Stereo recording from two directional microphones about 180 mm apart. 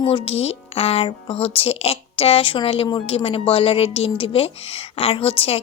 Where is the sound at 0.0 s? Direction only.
30° left (ahead or behind).